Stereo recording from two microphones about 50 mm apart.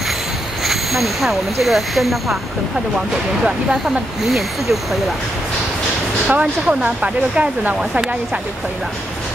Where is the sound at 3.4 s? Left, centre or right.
Centre.